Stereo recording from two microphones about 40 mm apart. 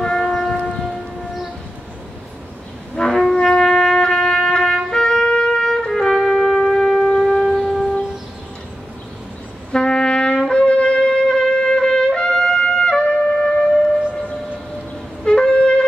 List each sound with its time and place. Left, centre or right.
0.0 s church bell: centre
3.0 s brass instrument: centre
4.9 s trumpet: centre
5.9 s music: centre
7.1 s shofar: centre
9.7 s music: left
10.5 s trumpet: left
13.2 s wind instrument: centre
15.2 s wind instrument: left